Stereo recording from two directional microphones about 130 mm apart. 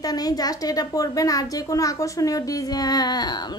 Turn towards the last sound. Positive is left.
turn(degrees=30)  # may be behind; listen again after turning